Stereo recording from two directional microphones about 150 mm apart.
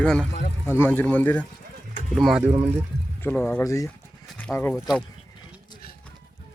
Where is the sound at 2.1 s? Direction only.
Centre (ahead or behind).